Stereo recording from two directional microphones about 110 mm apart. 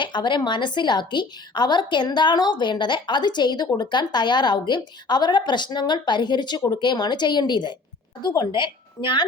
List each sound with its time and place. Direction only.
0.0 s a woman's voice: 45° left (ahead or behind)